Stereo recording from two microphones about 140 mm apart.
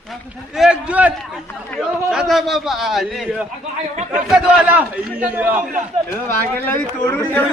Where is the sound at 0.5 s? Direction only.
5° right (ahead or behind).